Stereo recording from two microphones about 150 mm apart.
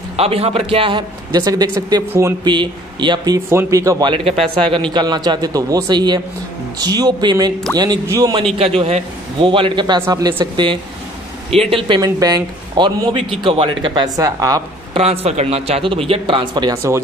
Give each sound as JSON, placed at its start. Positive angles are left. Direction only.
{"t": 0.2, "sound": "a man's voice", "side_deg": -40}
{"t": 3.3, "sound": "a man's voice", "side_deg": -20}
{"t": 8.5, "sound": "a man's voice", "side_deg": -45}
{"t": 12.0, "sound": "a man's voice", "side_deg": -25}
{"t": 15.0, "sound": "a man's voice", "side_deg": -45}